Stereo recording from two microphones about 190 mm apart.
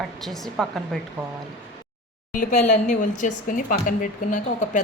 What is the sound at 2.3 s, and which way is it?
Speech, 40° left (ahead or behind).